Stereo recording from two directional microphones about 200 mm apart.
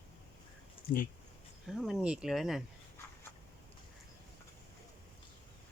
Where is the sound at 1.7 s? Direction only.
Centre (ahead or behind).